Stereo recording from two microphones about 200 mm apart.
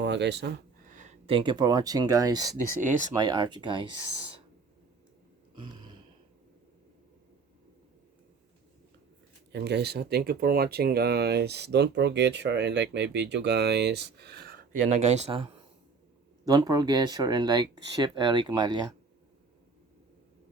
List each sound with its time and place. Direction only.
0.0 s speech: 60° right (ahead or behind)
0.9 s a sound: 40° right (ahead or behind)
1.3 s speech: 25° right (ahead or behind)
5.5 s gasp: 20° right (ahead or behind)
9.5 s speech: 60° right (ahead or behind)
14.8 s speech: 35° right (ahead or behind)